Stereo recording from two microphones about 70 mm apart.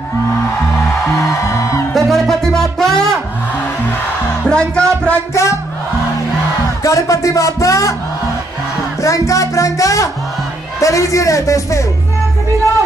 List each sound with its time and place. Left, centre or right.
1.2 s music: left
2.0 s music: centre
4.5 s speech: centre
6.8 s music: left
9.0 s music: left
10.8 s a man's voice: left